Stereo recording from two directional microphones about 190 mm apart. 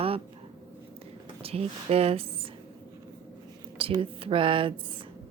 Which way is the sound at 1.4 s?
30° right (ahead or behind).